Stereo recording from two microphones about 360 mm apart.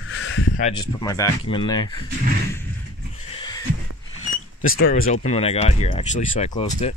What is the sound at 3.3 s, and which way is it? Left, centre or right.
Neigh, centre.